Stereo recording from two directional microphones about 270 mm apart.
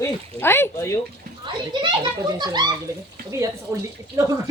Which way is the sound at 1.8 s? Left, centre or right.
Centre.